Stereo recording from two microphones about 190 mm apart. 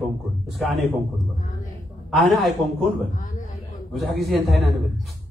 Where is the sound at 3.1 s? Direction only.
40° left (ahead or behind).